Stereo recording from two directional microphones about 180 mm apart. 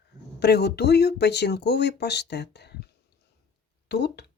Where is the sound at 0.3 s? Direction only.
65° left (ahead or behind).